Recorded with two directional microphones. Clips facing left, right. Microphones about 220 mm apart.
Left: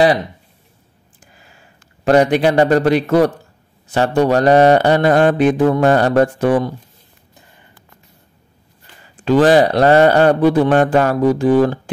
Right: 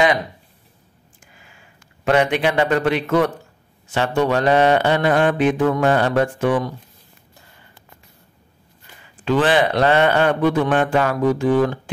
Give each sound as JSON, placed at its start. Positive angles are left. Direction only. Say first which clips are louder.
{"t": 1.2, "sound": "a sound", "louder": "left 3 dB", "side_deg": 40}
{"t": 3.9, "sound": "a man's voice", "louder": "left 5 dB", "side_deg": 40}
{"t": 9.0, "sound": "a man's voice", "louder": "left 6 dB", "side_deg": 40}